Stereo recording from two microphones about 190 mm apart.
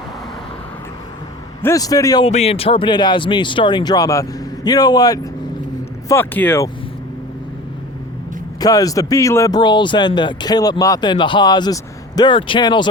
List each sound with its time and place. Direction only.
1.6 s speech: 20° left (ahead or behind)
2.2 s speech: 35° left (ahead or behind); by 6.7 s 10° left (ahead or behind)
8.6 s speech: 20° left (ahead or behind)